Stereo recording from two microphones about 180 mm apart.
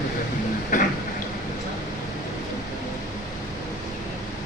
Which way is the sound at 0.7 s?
50° left (ahead or behind).